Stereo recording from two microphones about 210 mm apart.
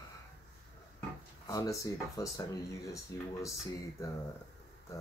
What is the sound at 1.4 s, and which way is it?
Speech, 15° left (ahead or behind).